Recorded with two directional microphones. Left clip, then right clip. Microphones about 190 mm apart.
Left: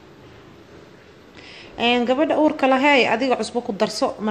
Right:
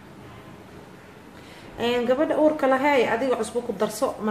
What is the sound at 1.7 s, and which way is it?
A woman's voice, 30° left (ahead or behind).